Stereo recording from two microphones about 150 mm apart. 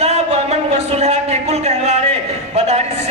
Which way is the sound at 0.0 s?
50° right (ahead or behind).